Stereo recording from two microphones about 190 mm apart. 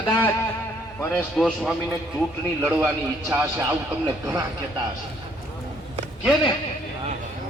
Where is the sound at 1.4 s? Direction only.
5° left (ahead or behind).